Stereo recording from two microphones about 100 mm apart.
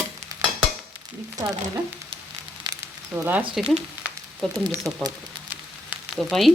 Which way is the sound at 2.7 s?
45° right (ahead or behind).